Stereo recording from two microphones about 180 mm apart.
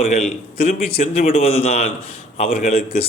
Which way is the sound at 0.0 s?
35° left (ahead or behind).